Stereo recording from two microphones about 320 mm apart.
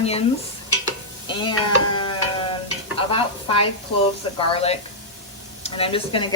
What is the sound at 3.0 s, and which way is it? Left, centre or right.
Speech, centre.